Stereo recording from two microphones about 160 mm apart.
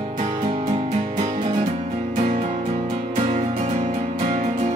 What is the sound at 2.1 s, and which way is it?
Music, 45° right (ahead or behind).